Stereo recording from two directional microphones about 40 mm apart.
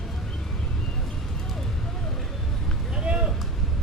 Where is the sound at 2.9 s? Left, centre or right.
Right.